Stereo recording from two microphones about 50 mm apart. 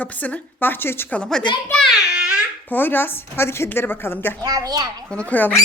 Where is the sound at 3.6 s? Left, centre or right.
Left.